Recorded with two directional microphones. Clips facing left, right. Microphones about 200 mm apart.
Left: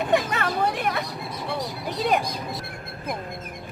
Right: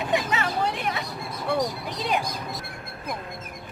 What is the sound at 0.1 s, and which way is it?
Vehicle, 55° left (ahead or behind).